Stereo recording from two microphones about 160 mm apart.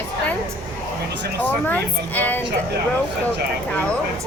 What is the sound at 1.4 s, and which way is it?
Speech, 10° left (ahead or behind).